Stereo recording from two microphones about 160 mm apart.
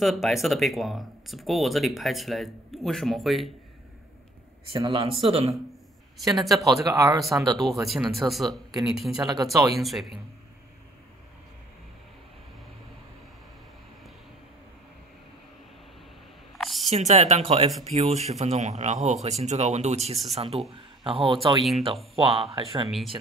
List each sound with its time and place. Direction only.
0.0 s speech: centre (ahead or behind)
4.7 s speech: 30° right (ahead or behind)
6.5 s speech: 20° right (ahead or behind)
7.9 s speech: centre (ahead or behind)
9.2 s speech: 25° right (ahead or behind)
9.8 s speech: centre (ahead or behind)
16.5 s a sound: centre (ahead or behind)
16.9 s speech: 45° right (ahead or behind)